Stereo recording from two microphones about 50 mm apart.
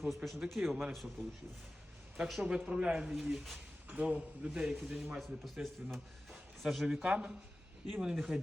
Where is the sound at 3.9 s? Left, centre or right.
Right.